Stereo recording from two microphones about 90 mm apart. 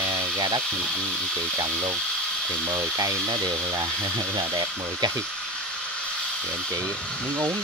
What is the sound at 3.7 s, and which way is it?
Speech, 30° right (ahead or behind).